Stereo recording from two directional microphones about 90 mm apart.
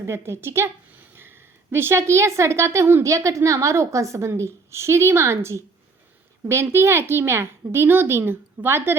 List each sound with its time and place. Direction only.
0.0 s a woman's voice: 30° right (ahead or behind)